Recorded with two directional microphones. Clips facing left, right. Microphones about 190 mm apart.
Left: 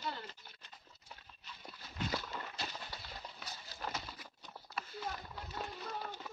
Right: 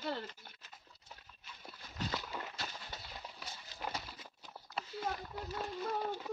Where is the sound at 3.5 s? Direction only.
20° right (ahead or behind).